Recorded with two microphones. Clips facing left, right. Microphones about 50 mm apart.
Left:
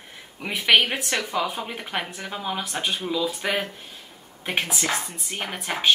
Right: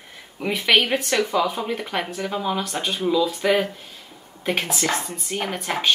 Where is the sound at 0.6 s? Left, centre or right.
Centre.